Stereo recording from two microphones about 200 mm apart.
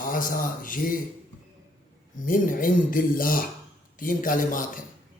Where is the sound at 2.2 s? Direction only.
45° left (ahead or behind).